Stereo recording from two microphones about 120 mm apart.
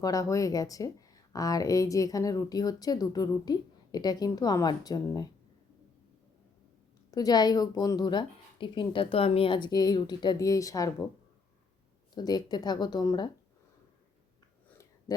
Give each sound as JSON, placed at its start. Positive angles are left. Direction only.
{"t": 0.0, "sound": "speech", "side_deg": 30}
{"t": 7.1, "sound": "speech", "side_deg": 30}
{"t": 12.1, "sound": "speech", "side_deg": 35}